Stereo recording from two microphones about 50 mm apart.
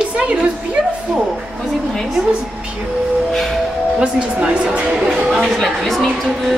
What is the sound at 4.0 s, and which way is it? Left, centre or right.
Speech, right.